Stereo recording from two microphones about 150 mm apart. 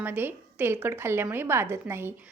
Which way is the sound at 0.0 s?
15° right (ahead or behind).